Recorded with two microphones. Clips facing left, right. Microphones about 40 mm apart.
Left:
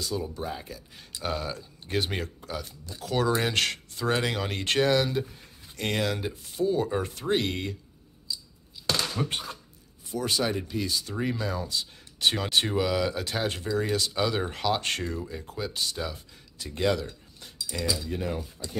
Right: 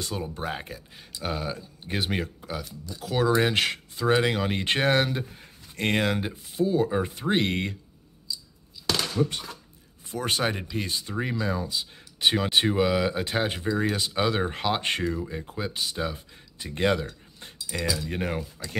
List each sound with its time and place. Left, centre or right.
0.3 s speech: right
1.2 s speech: centre
4.8 s speech: right
6.5 s speech: centre
7.0 s speech: centre; by 7.7 s right
9.2 s speech: left
10.0 s speech: right
11.1 s speech: centre; by 17.0 s right
17.4 s a sound: right
17.9 s speech: right